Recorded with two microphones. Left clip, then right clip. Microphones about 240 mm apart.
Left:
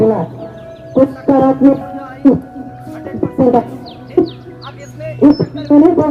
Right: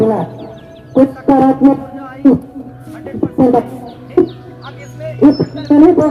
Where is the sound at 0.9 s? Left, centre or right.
Right.